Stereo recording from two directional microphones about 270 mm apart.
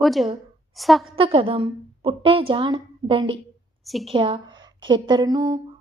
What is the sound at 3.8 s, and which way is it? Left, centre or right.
Speech, centre.